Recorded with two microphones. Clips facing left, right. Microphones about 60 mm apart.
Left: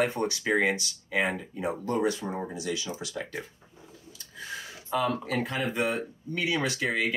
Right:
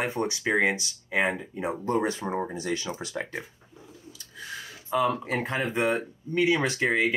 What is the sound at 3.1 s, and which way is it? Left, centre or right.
Speech, right.